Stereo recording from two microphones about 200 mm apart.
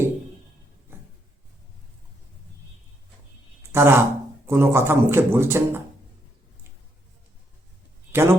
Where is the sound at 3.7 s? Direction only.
10° right (ahead or behind).